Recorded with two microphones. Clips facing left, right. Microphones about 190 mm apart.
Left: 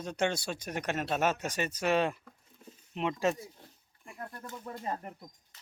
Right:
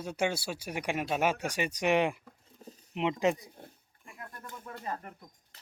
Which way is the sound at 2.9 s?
15° right (ahead or behind).